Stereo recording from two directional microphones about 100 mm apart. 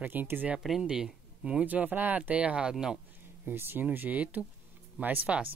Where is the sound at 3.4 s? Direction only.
20° right (ahead or behind).